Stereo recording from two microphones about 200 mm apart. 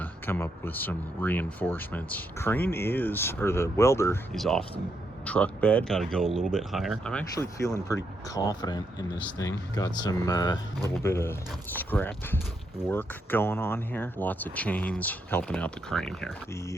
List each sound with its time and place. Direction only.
0.0 s speech: 10° left (ahead or behind)
4.4 s speech: centre (ahead or behind)
7.3 s speech: 15° left (ahead or behind)